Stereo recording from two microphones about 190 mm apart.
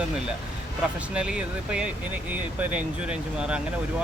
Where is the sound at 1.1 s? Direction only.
5° right (ahead or behind).